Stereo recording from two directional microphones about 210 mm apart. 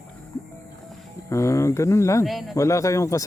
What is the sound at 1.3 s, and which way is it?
Speech, 15° left (ahead or behind).